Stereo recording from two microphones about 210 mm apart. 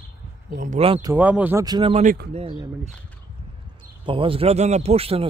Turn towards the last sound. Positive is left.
turn(degrees=-30)  # may be behind; listen again after turning